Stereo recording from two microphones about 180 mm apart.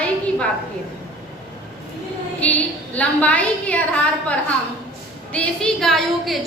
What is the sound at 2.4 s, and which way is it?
A woman's voice, 10° left (ahead or behind).